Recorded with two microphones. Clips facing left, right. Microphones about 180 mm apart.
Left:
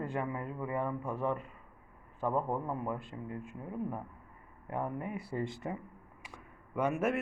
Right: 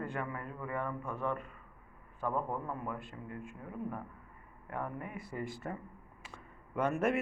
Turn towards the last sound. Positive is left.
turn(degrees=10)  # may be behind; listen again after turning